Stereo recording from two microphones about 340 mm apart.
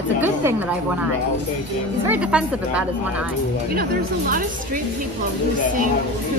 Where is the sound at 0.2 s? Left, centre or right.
Centre.